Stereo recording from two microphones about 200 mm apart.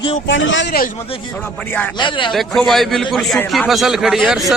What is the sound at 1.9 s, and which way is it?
Speech, 25° left (ahead or behind).